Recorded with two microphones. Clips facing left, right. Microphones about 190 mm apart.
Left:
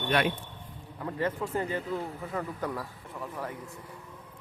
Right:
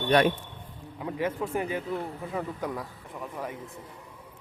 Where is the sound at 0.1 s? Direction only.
40° right (ahead or behind).